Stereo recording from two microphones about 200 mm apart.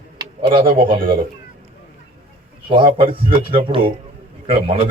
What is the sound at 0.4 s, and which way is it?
Speech, 25° right (ahead or behind).